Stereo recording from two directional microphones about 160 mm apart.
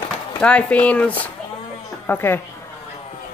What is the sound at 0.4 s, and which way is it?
Speech, 5° left (ahead or behind).